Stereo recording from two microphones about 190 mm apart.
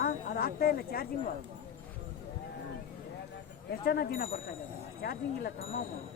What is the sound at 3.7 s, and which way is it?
Speech, 55° left (ahead or behind).